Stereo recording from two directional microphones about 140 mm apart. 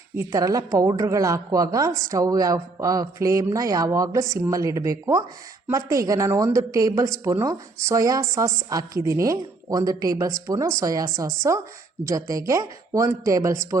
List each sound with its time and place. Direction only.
0.2 s a woman's voice: 25° right (ahead or behind)